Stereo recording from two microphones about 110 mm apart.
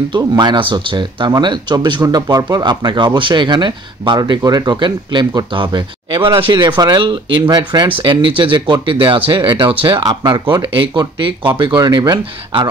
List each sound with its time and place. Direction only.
0.1 s speech: 45° right (ahead or behind)